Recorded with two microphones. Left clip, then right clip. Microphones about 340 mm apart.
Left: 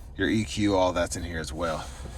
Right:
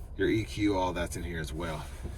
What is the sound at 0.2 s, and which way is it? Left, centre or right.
Speech, centre.